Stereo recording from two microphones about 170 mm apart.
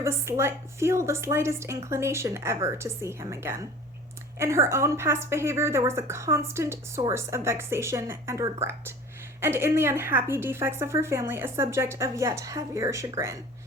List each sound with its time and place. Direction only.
0.0 s a woman's voice: 15° right (ahead or behind)